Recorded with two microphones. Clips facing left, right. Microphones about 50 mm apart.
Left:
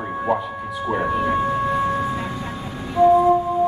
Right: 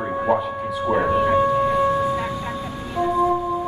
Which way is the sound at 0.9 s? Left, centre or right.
Centre.